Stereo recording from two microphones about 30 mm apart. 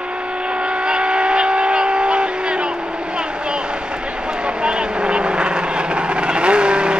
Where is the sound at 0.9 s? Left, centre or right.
Right.